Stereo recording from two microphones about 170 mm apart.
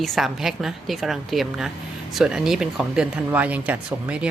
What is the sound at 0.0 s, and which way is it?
A woman's voice, centre (ahead or behind).